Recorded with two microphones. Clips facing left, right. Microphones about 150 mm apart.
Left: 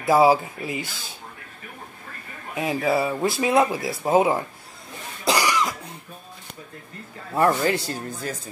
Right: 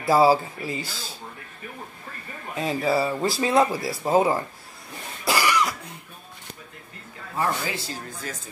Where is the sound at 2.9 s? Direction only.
15° left (ahead or behind).